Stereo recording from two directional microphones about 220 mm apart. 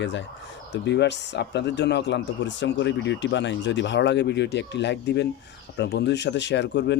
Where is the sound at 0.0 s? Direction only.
55° left (ahead or behind).